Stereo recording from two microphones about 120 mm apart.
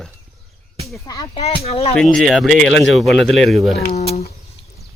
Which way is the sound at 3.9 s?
60° left (ahead or behind).